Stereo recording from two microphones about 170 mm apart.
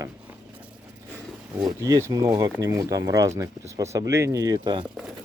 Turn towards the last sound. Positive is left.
turn(degrees=-25)  # may be behind; listen again after turning